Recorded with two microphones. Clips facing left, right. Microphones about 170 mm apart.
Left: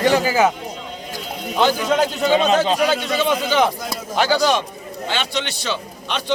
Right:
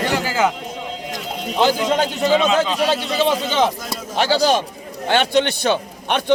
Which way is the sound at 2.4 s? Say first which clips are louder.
Left 1 dB; 35° left (ahead or behind).